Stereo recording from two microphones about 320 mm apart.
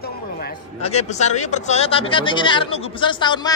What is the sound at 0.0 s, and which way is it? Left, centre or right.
Snicker, left.